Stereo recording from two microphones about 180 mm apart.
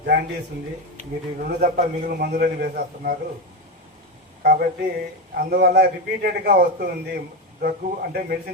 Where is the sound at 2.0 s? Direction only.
55° right (ahead or behind).